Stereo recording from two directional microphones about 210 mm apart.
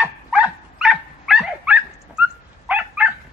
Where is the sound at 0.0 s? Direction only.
5° right (ahead or behind).